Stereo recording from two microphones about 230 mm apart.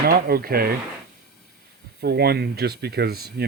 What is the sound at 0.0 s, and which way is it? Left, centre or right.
Speech, right.